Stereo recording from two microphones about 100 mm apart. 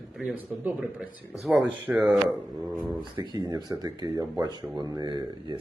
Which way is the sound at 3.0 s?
50° right (ahead or behind).